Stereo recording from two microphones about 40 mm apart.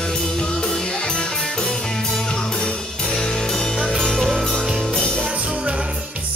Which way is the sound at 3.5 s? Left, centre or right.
Centre.